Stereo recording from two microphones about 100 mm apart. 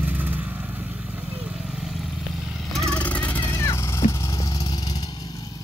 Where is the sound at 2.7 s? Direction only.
Centre (ahead or behind).